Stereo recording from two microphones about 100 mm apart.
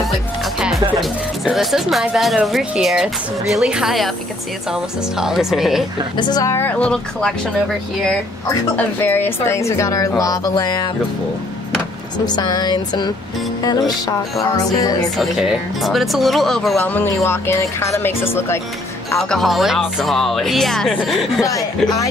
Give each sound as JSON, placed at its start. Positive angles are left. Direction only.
{"t": 0.6, "sound": "music", "side_deg": -5}
{"t": 0.9, "sound": "speech", "side_deg": 0}
{"t": 6.1, "sound": "a woman's voice", "side_deg": 40}
{"t": 6.8, "sound": "speech", "side_deg": 10}
{"t": 8.7, "sound": "a woman's voice", "side_deg": 20}
{"t": 12.3, "sound": "a sound", "side_deg": 45}
{"t": 13.6, "sound": "a woman's voice", "side_deg": 40}
{"t": 15.1, "sound": "speech", "side_deg": 0}
{"t": 16.8, "sound": "speech", "side_deg": 20}
{"t": 19.1, "sound": "speech", "side_deg": 5}
{"t": 21.5, "sound": "a woman's voice", "side_deg": 35}